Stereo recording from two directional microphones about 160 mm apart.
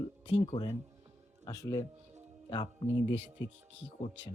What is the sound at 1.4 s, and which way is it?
Speech, 20° left (ahead or behind).